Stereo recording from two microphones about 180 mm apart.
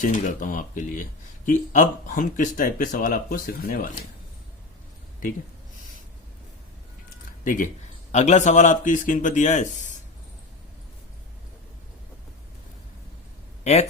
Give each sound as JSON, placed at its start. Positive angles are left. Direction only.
{"t": 0.0, "sound": "speech", "side_deg": 45}
{"t": 5.2, "sound": "speech", "side_deg": 45}
{"t": 7.4, "sound": "speech", "side_deg": 50}